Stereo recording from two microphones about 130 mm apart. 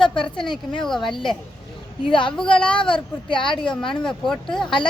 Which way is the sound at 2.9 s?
40° left (ahead or behind).